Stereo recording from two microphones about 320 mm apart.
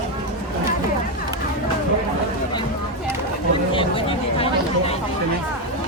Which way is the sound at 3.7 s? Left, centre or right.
Centre.